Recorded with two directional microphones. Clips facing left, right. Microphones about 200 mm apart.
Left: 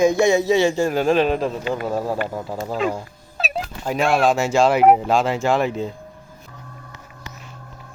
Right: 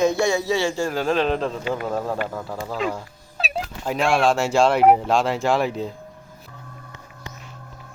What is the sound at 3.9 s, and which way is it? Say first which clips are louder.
Speech: left 1 dB; 5° left (ahead or behind).